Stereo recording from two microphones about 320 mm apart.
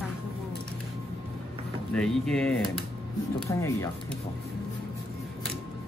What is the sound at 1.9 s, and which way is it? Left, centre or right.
Speech, centre.